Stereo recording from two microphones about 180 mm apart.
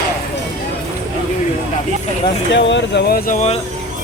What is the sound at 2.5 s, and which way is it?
Speech, 85° left.